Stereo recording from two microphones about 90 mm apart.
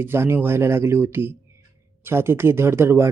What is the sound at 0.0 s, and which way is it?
Speech, 25° right (ahead or behind).